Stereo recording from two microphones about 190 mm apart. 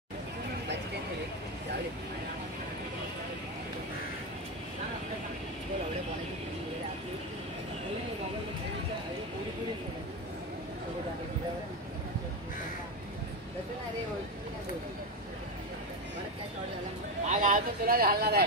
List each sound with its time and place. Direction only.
17.3 s speech: 45° right (ahead or behind)